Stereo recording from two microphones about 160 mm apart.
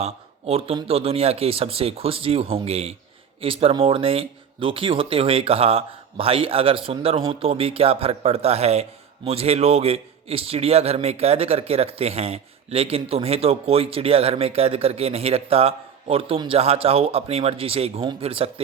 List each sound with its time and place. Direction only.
0.0 s speech: 40° right (ahead or behind)